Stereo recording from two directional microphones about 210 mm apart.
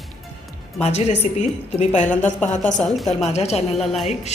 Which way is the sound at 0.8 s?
30° left (ahead or behind).